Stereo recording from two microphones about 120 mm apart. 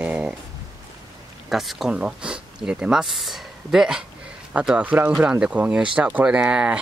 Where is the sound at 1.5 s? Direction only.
Centre (ahead or behind).